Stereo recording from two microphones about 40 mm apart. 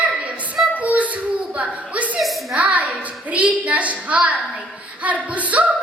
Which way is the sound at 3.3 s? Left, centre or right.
Right.